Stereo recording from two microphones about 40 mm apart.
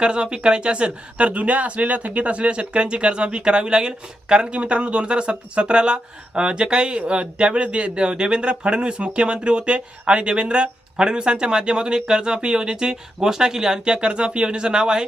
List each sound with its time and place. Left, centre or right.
0.0 s speech: right